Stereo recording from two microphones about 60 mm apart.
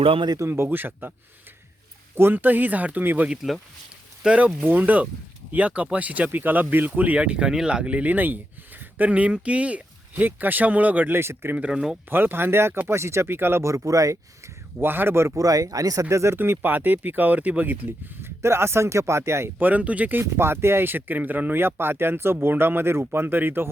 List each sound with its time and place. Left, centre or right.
0.3 s speech: right
2.1 s speech: right
4.2 s speech: centre
4.6 s speech: right
11.1 s speech: right
11.7 s speech: centre
12.0 s speech: right
14.8 s speech: right
15.3 s speech: right
16.4 s speech: right
17.8 s speech: right
19.5 s speech: right
20.3 s speech: right